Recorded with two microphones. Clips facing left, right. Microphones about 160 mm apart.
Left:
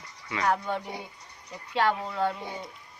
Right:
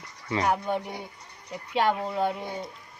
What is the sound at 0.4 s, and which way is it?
Speech, 15° right (ahead or behind).